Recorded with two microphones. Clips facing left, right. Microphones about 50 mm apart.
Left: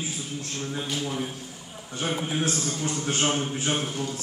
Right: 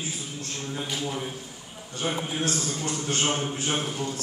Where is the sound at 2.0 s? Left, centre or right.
Centre.